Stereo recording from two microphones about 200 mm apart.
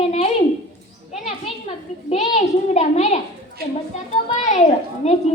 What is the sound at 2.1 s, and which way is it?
A child's voice, 30° left (ahead or behind).